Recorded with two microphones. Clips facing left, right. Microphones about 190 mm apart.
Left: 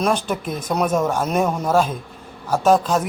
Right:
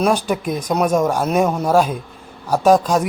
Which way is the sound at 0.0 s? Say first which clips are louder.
Right 3 dB; 10° right (ahead or behind).